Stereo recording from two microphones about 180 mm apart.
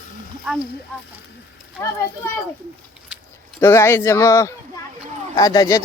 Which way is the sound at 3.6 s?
15° left (ahead or behind).